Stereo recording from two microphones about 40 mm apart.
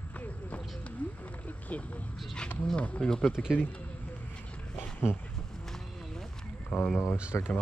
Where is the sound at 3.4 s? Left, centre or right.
Centre.